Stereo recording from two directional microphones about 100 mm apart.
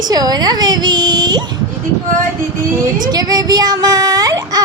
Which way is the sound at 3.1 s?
40° right (ahead or behind).